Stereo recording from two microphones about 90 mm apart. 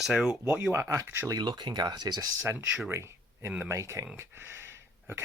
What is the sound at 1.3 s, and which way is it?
Speech, 55° right (ahead or behind).